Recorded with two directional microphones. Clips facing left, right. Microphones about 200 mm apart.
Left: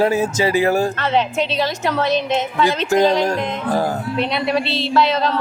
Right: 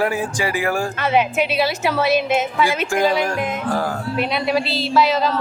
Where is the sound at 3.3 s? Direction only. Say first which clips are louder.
Left 2 dB; 20° left (ahead or behind).